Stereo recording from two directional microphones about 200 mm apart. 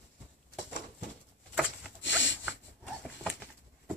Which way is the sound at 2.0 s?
65° left (ahead or behind).